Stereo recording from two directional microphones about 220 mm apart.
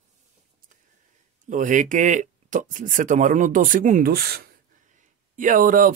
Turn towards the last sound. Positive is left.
turn(degrees=-40)  # may be behind; listen again after turning